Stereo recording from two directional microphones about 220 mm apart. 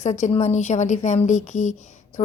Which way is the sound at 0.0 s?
35° left (ahead or behind).